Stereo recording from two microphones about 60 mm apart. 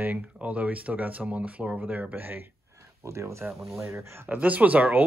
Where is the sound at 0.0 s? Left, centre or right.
Right.